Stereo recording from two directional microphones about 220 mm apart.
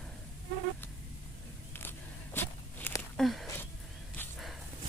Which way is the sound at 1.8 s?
10° left (ahead or behind).